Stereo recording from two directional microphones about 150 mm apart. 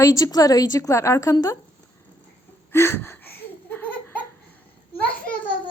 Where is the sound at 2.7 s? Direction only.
15° left (ahead or behind).